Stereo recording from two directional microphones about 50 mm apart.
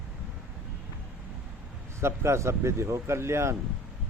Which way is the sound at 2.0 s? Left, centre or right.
Right.